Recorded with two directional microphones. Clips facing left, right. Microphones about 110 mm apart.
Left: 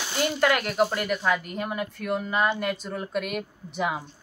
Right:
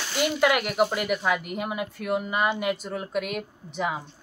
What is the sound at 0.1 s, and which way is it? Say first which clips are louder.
Speech: right 1 dB; 5° right (ahead or behind).